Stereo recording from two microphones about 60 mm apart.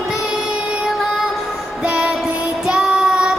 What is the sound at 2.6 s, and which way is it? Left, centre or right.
Child singing, centre.